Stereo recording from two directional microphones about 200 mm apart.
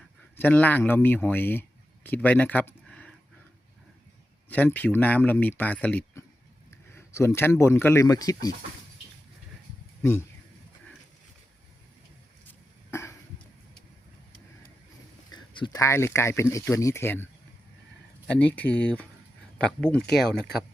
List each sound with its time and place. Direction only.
0.3 s speech: 10° left (ahead or behind)
4.4 s speech: 10° left (ahead or behind)
6.7 s a sound: 15° left (ahead or behind)
7.6 s speech: 10° left (ahead or behind)
10.0 s speech: 10° left (ahead or behind)
12.9 s cough: 15° left (ahead or behind)
15.3 s speech: 20° left (ahead or behind)
18.3 s speech: 5° left (ahead or behind)